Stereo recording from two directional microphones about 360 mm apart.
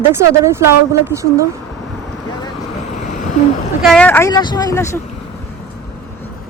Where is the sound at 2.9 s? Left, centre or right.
Centre.